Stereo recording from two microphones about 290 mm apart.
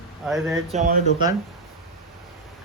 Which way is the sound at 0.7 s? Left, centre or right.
Right.